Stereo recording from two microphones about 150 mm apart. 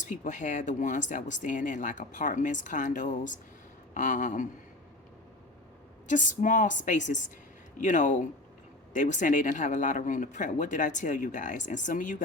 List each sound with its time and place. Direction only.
0.0 s speech: 55° left (ahead or behind)
6.1 s speech: 55° left (ahead or behind)